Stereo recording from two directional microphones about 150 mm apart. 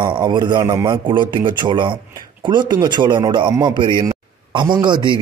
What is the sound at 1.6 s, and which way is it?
A man's voice, 30° right (ahead or behind).